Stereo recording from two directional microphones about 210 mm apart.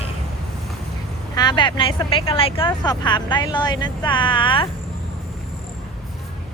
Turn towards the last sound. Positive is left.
turn(degrees=25)  # may be behind; listen again after turning